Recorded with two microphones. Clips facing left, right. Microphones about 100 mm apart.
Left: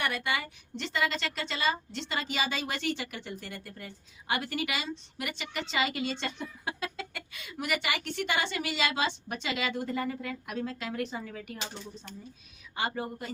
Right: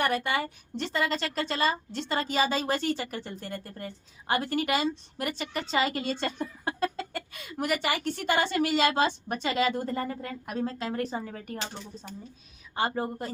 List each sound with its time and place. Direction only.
0.0 s a woman's voice: 40° right (ahead or behind)
12.7 s a woman's voice: 40° right (ahead or behind)